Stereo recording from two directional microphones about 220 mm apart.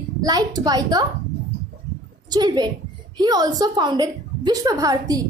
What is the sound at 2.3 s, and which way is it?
A woman's voice, 20° right (ahead or behind).